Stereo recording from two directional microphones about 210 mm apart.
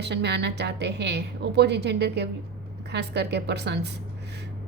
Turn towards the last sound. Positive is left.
turn(degrees=-55)  # may be behind; listen again after turning